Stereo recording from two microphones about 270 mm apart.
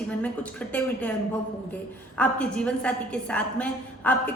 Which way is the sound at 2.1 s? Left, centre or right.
Centre.